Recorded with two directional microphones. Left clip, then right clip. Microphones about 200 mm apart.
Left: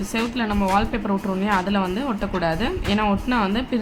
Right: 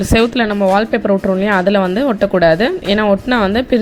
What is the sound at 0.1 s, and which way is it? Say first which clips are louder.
A woman's voice: right 11 dB; 35° right (ahead or behind).